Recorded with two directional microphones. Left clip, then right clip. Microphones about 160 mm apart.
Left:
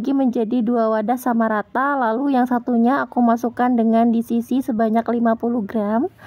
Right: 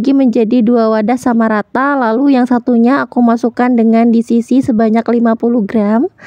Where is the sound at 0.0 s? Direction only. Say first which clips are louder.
Right 9 dB; 30° right (ahead or behind).